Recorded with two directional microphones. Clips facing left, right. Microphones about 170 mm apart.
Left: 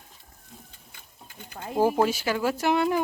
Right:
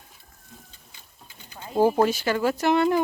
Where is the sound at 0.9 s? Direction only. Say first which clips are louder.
Left 5 dB; 55° left (ahead or behind).